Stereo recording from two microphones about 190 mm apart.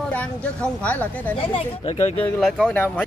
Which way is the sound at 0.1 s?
5° left (ahead or behind).